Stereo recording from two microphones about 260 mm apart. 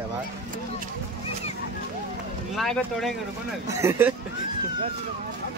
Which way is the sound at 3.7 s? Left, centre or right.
Centre.